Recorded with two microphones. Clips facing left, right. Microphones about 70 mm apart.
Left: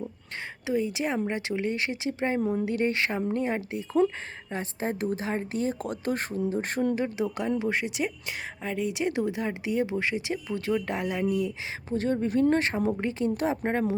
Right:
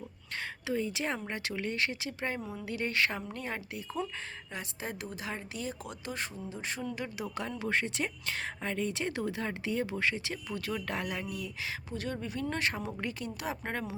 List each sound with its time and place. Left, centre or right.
0.7 s speech: centre
2.4 s a woman's voice: left
2.8 s a woman's voice: left
6.9 s a woman's voice: left